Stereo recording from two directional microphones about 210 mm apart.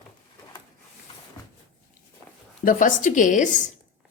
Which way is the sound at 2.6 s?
40° left (ahead or behind).